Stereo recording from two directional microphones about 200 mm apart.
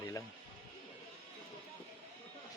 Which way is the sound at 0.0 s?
15° left (ahead or behind).